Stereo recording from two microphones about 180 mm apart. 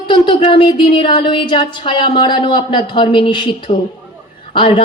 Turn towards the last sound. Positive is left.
turn(degrees=25)  # may be behind; listen again after turning